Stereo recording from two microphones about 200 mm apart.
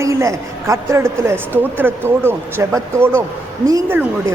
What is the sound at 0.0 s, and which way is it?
A woman's voice, 15° right (ahead or behind).